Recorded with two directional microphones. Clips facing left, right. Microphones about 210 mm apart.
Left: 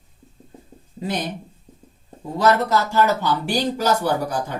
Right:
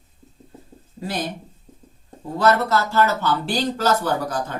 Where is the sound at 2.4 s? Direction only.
15° left (ahead or behind).